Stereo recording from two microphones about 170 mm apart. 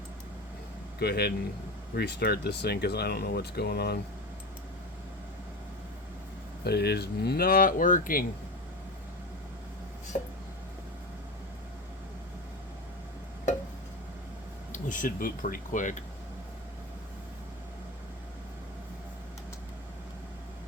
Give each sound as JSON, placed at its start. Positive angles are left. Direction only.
{"t": 0.9, "sound": "speech", "side_deg": 70}
{"t": 6.7, "sound": "speech", "side_deg": 70}
{"t": 10.1, "sound": "speech", "side_deg": 50}
{"t": 14.7, "sound": "speech", "side_deg": 50}